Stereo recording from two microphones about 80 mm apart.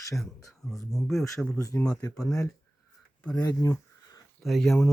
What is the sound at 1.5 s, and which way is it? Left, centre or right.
Speech, left.